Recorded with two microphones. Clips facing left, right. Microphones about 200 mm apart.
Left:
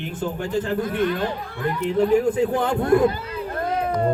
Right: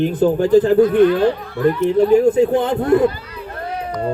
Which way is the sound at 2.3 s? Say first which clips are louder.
Right 6 dB; 25° right (ahead or behind).